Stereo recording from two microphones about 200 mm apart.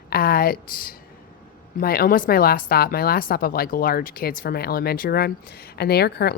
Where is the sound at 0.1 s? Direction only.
50° left (ahead or behind).